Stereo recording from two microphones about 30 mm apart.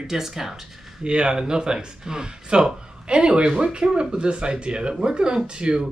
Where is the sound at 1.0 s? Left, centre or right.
Right.